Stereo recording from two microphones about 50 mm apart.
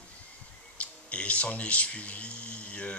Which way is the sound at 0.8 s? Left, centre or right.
Left.